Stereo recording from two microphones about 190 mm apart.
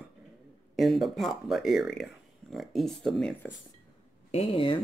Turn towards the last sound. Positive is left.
turn(degrees=25)  # may be behind; listen again after turning